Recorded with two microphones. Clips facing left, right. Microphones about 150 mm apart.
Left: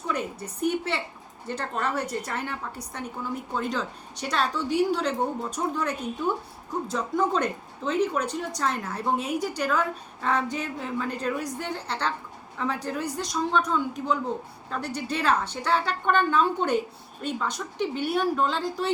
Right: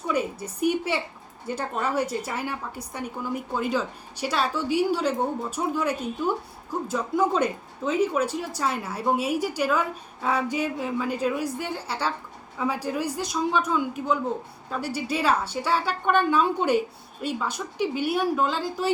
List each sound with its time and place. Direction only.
0.1 s speech: 10° right (ahead or behind)